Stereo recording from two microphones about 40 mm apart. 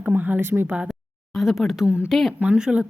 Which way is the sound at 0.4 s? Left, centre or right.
Right.